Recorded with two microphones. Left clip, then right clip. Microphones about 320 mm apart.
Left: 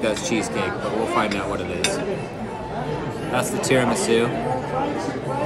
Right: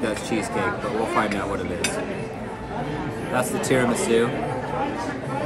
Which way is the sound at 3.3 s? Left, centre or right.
Centre.